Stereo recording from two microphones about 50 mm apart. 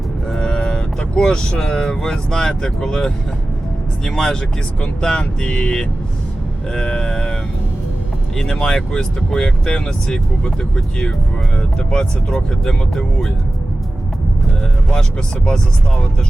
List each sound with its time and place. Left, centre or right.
0.3 s cattle: centre
1.5 s speech: centre
8.4 s speech: centre